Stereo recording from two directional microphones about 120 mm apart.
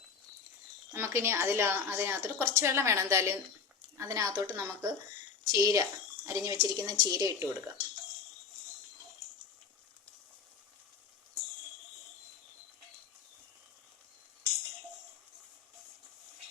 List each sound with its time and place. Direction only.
0.9 s a woman's voice: 20° right (ahead or behind)